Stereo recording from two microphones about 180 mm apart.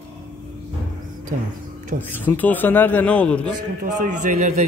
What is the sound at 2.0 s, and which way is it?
A man's voice, 10° left (ahead or behind).